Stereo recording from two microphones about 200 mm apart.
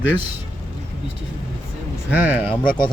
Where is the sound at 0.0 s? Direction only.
70° left (ahead or behind).